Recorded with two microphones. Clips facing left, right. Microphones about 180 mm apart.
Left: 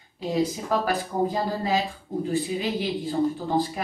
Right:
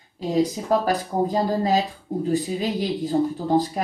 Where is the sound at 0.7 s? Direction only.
40° right (ahead or behind).